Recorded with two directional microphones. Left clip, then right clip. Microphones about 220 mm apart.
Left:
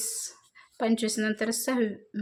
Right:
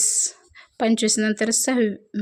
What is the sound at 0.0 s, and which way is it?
Speech, 35° right (ahead or behind).